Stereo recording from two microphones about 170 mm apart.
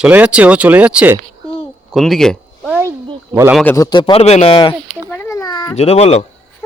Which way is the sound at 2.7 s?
15° right (ahead or behind).